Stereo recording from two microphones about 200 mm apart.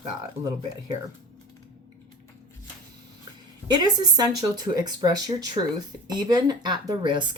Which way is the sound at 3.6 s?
20° right (ahead or behind).